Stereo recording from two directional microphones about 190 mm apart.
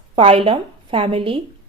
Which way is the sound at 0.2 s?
30° right (ahead or behind).